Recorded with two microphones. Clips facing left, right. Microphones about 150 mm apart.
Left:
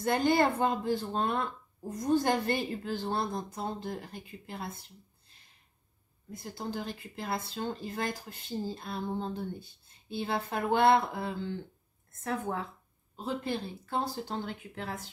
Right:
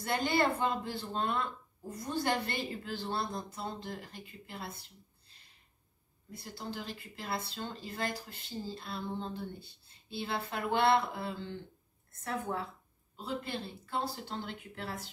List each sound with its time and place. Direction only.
0.0 s speech: 45° left (ahead or behind)
6.3 s speech: 45° left (ahead or behind)
13.1 s speech: 45° left (ahead or behind)